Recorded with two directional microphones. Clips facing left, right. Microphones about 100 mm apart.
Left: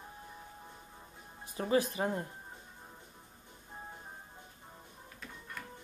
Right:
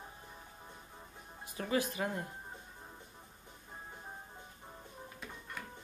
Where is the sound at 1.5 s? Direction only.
30° left (ahead or behind).